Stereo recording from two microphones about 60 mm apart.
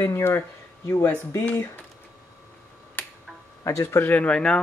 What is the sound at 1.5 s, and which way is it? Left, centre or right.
Speech, left.